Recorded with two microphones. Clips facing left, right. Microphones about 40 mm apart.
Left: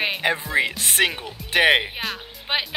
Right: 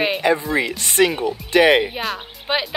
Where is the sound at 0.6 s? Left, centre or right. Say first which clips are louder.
Right 3 dB; left.